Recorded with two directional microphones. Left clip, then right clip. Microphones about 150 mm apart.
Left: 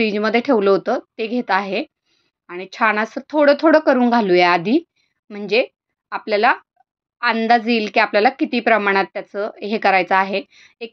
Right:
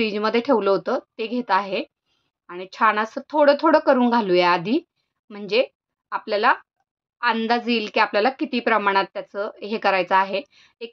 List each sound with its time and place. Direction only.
0.0 s a woman's voice: 15° left (ahead or behind)